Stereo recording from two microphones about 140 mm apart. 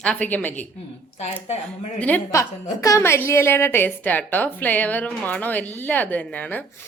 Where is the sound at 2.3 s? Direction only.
20° left (ahead or behind).